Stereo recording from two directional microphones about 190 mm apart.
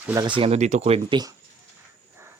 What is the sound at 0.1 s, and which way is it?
Speech, 20° right (ahead or behind).